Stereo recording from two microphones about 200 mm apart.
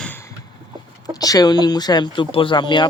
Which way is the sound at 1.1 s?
20° left (ahead or behind).